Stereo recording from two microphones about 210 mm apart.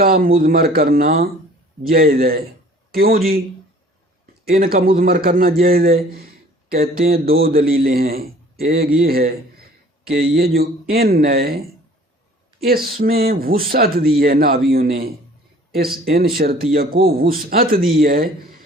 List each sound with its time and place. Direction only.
0.0 s speech: 45° right (ahead or behind)
4.5 s speech: 45° right (ahead or behind)
12.6 s speech: 45° right (ahead or behind)
16.1 s speech: 45° right (ahead or behind)